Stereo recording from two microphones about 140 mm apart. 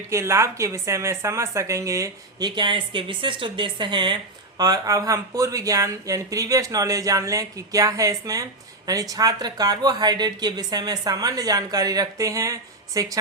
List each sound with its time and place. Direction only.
0.1 s a woman's voice: 20° right (ahead or behind)